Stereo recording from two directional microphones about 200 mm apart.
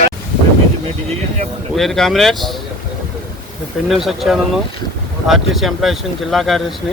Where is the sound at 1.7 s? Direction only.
Centre (ahead or behind).